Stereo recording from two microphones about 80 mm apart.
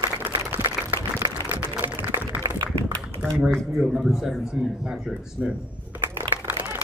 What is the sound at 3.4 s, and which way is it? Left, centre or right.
Speech, centre.